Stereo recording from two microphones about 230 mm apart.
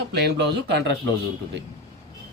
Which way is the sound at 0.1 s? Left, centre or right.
Right.